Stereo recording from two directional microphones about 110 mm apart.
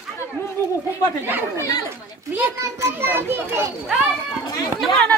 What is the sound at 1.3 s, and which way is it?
A child's voice, 20° right (ahead or behind).